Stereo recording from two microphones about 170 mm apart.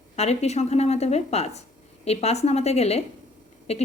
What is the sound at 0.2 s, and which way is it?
A woman's voice, 40° left (ahead or behind).